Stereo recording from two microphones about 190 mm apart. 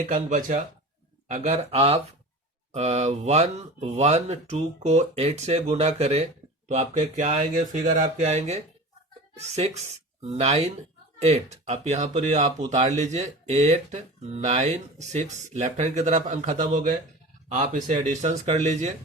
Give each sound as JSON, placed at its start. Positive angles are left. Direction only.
{"t": 0.0, "sound": "speech", "side_deg": -40}